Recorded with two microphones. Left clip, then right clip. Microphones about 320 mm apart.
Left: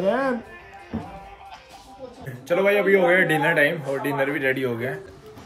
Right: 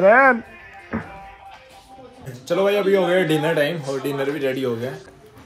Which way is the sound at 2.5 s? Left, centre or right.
Centre.